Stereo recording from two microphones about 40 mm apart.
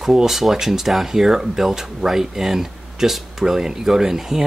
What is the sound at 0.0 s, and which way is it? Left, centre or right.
Speech, centre.